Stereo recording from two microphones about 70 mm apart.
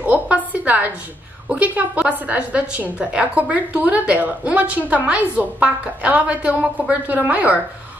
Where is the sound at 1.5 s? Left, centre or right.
Right.